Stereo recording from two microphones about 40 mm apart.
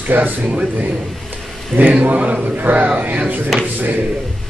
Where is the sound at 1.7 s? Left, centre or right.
Right.